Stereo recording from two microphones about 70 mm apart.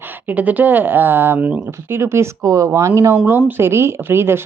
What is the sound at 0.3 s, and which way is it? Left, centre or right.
Speech, right.